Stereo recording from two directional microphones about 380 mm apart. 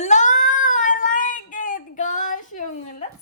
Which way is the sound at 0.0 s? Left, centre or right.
Centre.